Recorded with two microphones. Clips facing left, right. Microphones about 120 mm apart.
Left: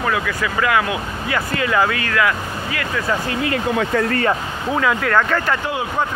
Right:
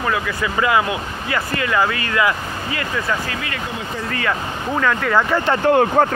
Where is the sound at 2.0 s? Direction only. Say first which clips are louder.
Even; 10° right (ahead or behind).